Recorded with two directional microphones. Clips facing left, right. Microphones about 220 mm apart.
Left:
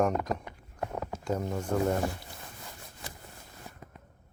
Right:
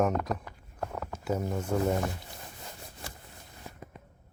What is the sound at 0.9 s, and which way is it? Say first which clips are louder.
Rowboat: left 2 dB; 15° left (ahead or behind).